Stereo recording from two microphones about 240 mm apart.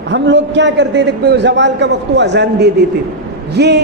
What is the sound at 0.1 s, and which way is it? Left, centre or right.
A man's voice, right.